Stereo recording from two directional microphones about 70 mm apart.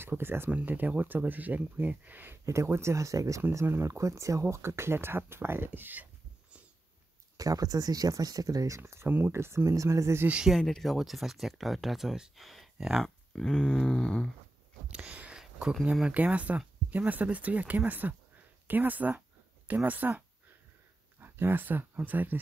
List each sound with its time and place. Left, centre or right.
0.2 s speech: right
0.5 s speech: right
2.4 s speech: right
7.3 s speech: right
10.6 s speech: centre
13.3 s a sound: centre
14.9 s a sound: centre
15.8 s speech: centre